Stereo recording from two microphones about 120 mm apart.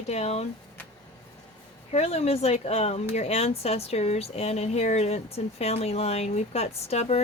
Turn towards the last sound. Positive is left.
turn(degrees=60)  # may be behind; listen again after turning